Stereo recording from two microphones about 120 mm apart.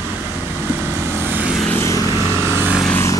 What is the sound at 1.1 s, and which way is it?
Vehicle, 20° right (ahead or behind).